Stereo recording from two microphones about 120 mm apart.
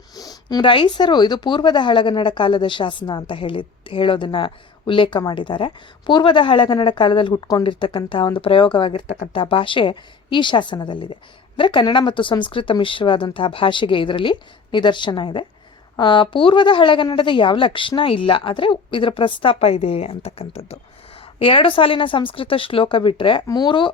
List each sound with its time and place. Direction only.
0.2 s a woman's voice: 35° left (ahead or behind)